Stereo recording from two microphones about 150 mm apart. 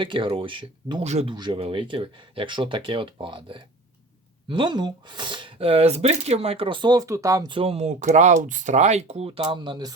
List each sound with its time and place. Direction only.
0.0 s speech: 35° right (ahead or behind)
1.0 s speech: 45° right (ahead or behind)
1.3 s speech: 35° right (ahead or behind)